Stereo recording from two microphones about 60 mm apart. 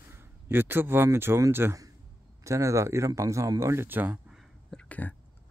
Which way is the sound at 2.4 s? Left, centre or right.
Right.